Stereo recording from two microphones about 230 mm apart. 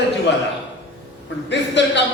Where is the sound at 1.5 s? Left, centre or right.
Left.